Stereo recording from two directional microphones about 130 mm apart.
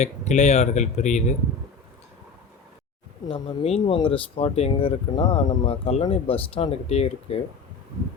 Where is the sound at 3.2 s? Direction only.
40° left (ahead or behind).